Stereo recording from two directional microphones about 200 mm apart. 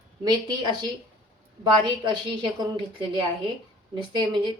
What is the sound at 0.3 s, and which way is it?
A woman's voice, 20° right (ahead or behind).